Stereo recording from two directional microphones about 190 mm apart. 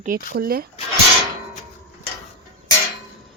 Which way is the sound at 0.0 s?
50° right (ahead or behind).